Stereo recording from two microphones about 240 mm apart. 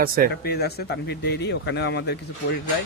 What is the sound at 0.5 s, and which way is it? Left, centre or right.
Speech, left.